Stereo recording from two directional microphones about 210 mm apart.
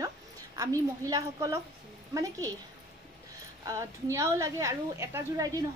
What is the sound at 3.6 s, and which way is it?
A woman's voice, 15° right (ahead or behind).